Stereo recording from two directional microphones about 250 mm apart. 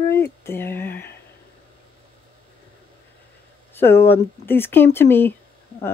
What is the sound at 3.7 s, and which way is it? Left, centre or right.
Speech, centre.